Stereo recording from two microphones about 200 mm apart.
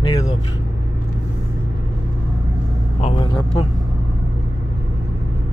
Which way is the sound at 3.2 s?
25° left (ahead or behind).